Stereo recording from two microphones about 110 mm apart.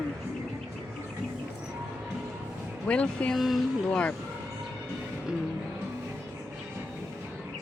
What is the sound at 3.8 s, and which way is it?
Speech, 10° left (ahead or behind).